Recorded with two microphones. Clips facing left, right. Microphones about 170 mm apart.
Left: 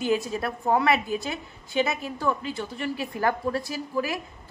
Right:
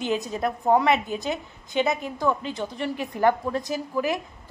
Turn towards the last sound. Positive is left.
turn(degrees=-20)  # may be behind; listen again after turning